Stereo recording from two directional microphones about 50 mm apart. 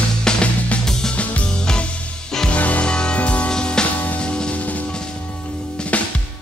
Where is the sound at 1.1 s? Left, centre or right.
Left.